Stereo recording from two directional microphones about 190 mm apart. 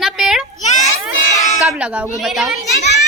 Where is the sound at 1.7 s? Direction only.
5° right (ahead or behind).